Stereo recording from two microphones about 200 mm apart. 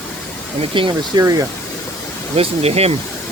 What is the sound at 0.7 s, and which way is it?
Speech, 25° right (ahead or behind).